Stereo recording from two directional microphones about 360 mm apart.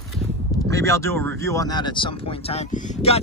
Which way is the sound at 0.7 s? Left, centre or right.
Centre.